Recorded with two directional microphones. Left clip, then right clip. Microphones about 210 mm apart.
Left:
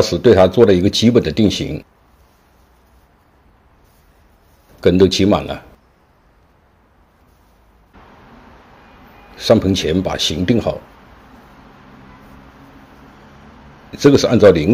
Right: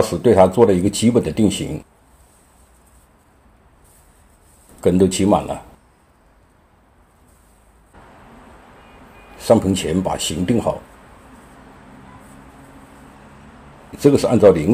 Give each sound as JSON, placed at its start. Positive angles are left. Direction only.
{"t": 0.0, "sound": "speech", "side_deg": 25}
{"t": 4.7, "sound": "speech", "side_deg": 25}
{"t": 9.4, "sound": "speech", "side_deg": 20}
{"t": 13.9, "sound": "speech", "side_deg": 20}